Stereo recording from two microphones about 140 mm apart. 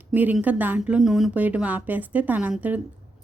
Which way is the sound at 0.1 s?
10° right (ahead or behind).